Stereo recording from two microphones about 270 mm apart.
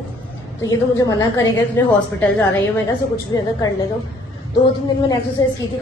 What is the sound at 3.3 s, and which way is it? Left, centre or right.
Speech, centre.